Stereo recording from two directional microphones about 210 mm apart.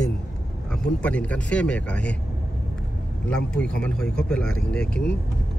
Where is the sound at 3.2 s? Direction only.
5° left (ahead or behind).